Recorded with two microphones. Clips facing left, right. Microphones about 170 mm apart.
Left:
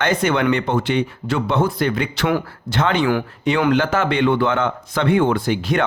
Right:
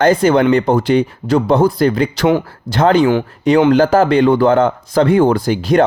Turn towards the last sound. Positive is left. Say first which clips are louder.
# right 5 dB
turn(degrees=-40)  # may be behind; listen again after turning